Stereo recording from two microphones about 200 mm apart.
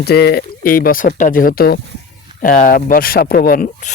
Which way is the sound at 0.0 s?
55° left (ahead or behind).